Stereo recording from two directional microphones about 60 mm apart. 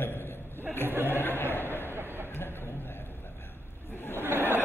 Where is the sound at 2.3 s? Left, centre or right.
Left.